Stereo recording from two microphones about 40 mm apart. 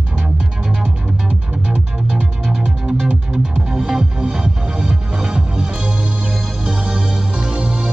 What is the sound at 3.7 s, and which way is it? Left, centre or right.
Music, centre.